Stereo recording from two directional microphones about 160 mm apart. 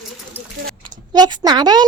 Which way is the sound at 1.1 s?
25° right (ahead or behind).